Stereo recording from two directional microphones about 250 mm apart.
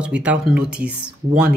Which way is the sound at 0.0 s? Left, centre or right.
Centre.